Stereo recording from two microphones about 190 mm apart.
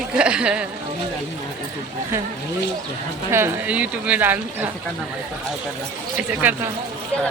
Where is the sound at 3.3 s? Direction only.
10° right (ahead or behind).